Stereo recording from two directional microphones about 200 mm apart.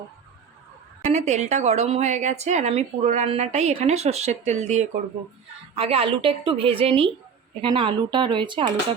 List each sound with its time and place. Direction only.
1.0 s a woman's voice: 35° right (ahead or behind)